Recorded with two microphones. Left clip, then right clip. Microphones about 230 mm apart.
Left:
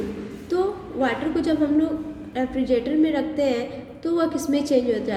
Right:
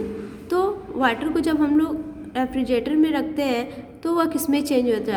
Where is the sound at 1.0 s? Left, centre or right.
Right.